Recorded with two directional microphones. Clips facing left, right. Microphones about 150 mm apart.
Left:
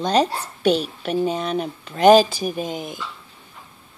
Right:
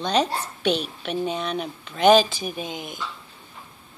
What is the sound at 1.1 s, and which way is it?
Speech, 5° left (ahead or behind).